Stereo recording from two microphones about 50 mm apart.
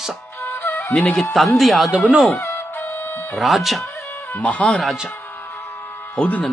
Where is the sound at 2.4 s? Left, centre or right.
Left.